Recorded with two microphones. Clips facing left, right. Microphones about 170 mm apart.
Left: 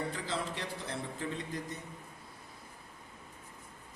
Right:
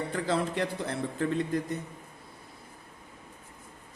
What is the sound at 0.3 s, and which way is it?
A man's voice, 55° right (ahead or behind).